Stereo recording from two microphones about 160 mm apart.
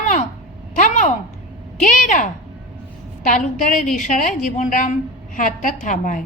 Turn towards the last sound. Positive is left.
turn(degrees=55)  # may be behind; listen again after turning